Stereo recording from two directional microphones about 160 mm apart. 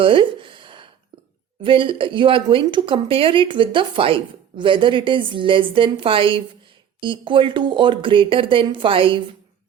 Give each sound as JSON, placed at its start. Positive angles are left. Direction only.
{"t": 0.0, "sound": "a woman's voice", "side_deg": -35}